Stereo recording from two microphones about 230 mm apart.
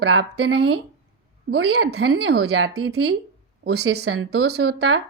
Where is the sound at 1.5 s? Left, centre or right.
Right.